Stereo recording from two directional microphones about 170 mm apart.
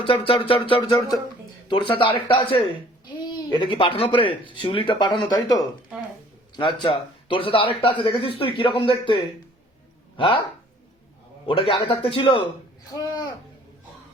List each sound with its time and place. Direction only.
0.0 s speech: 30° left (ahead or behind)
6.6 s speech: 30° left (ahead or behind)
11.4 s speech: 30° left (ahead or behind)
12.9 s a sound: 20° left (ahead or behind)